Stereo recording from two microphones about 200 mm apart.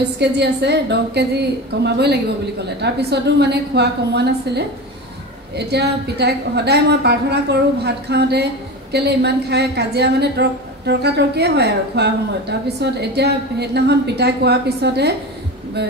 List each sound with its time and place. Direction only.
0.0 s a woman's voice: 55° right (ahead or behind)
5.7 s a woman's voice: 55° right (ahead or behind)